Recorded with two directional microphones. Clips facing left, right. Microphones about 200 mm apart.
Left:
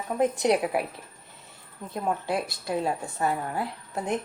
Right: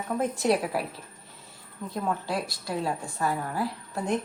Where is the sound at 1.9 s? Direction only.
20° left (ahead or behind).